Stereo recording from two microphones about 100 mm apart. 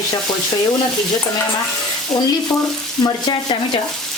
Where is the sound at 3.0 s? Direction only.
50° left (ahead or behind).